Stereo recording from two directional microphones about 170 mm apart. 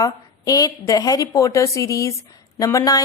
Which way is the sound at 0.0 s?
20° left (ahead or behind).